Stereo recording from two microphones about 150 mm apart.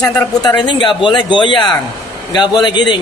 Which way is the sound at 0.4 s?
30° left (ahead or behind).